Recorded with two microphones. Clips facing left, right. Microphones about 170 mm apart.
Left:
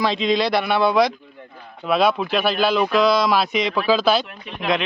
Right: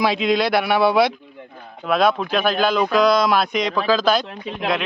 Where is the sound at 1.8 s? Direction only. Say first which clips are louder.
Even; 5° left (ahead or behind).